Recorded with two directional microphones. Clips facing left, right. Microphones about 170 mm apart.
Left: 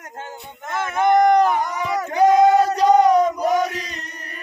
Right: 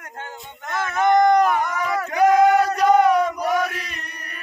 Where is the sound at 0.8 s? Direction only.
15° left (ahead or behind).